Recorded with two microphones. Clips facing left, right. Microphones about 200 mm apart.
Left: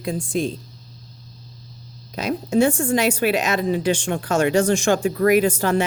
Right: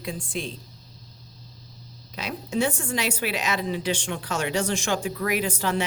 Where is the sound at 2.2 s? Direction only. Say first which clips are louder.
Left 8 dB; 45° left (ahead or behind).